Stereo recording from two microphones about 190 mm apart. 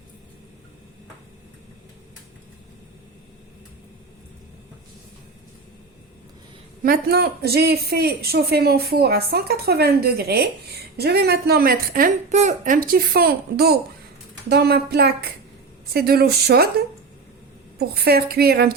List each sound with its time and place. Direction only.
6.8 s speech: 50° right (ahead or behind)